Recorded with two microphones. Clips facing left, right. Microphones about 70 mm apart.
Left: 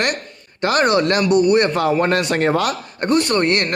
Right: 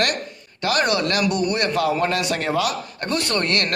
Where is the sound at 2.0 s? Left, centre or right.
Left.